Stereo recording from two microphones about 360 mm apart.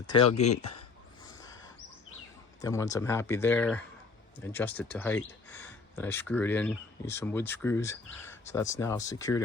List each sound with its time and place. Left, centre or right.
0.1 s speech: centre
2.6 s speech: centre